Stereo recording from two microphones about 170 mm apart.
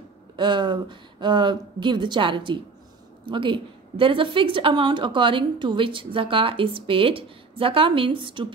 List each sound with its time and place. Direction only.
0.4 s a woman's voice: 25° right (ahead or behind)